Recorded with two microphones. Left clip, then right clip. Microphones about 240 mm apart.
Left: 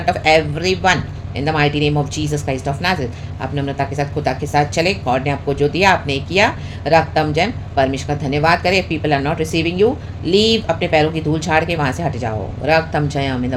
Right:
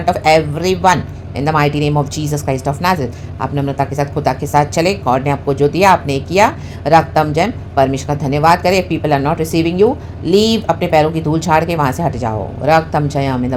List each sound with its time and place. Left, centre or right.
0.0 s speech: right